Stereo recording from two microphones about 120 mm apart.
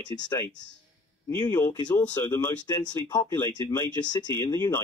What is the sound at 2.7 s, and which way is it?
Speech, 35° left (ahead or behind).